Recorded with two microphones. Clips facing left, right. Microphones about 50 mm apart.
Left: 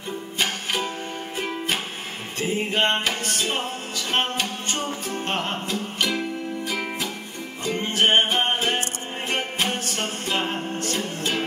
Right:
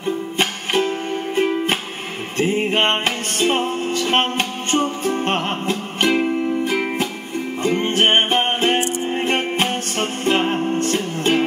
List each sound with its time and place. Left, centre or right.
1.3 s music: right